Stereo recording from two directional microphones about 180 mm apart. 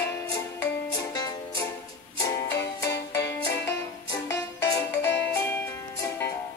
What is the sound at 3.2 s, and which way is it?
Music, 70° left (ahead or behind).